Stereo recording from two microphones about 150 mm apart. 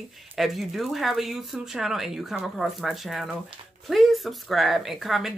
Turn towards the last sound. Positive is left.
turn(degrees=0)  # may be behind; listen again after turning